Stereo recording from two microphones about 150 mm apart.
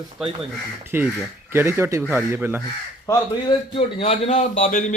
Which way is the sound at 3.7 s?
40° left (ahead or behind).